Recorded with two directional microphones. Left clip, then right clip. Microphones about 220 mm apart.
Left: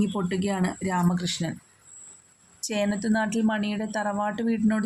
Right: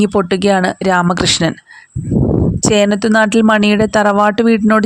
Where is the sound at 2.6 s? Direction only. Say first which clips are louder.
Right 14 dB; 40° right (ahead or behind).